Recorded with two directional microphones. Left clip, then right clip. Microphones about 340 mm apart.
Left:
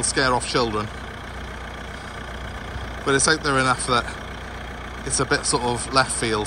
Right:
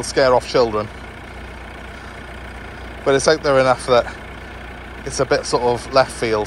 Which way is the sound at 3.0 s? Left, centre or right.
Centre.